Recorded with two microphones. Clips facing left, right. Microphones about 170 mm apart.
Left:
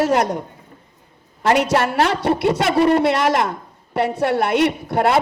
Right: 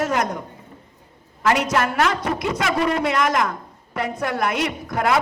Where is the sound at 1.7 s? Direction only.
30° left (ahead or behind).